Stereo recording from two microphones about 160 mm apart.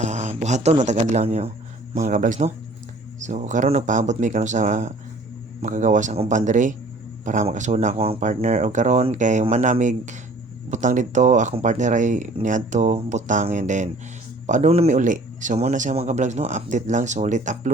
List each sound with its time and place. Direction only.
0.0 s speech: 50° right (ahead or behind)
2.0 s speech: 55° right (ahead or behind)